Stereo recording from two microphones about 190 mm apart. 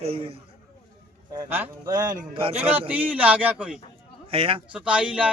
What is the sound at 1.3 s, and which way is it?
Speech, 15° right (ahead or behind).